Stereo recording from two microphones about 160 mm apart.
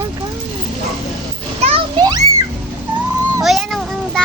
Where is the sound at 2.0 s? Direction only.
25° right (ahead or behind).